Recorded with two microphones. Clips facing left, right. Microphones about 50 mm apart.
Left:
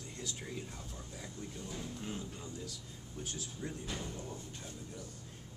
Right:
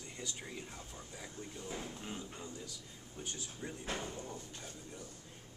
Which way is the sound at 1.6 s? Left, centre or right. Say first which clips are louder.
Right 2 dB; right.